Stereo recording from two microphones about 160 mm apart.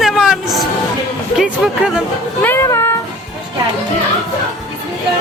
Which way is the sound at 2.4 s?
15° left (ahead or behind).